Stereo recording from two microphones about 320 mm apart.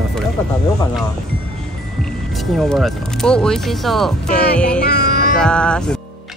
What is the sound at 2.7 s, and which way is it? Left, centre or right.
Speech, centre.